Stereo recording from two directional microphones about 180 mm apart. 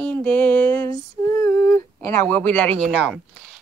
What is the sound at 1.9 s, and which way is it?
Speech, 10° left (ahead or behind).